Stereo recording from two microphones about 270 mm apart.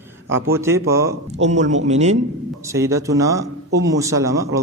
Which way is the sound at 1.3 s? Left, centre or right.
Right.